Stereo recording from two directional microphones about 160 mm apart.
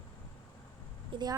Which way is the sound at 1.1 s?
25° right (ahead or behind).